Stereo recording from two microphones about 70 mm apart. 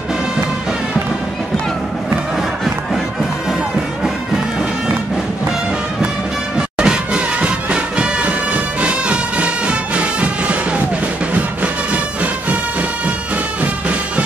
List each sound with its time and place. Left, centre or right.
6.5 s music: centre
13.6 s music: centre